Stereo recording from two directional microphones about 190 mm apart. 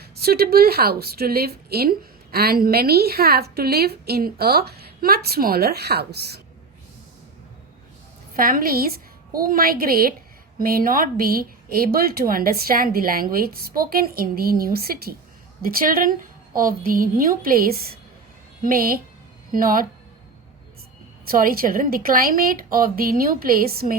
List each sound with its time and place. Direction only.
0.0 s a woman's voice: 55° right (ahead or behind)
8.4 s a woman's voice: 50° right (ahead or behind)
21.2 s a woman's voice: 50° right (ahead or behind)